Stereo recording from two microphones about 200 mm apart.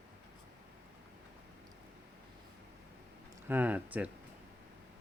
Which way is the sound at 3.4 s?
10° right (ahead or behind).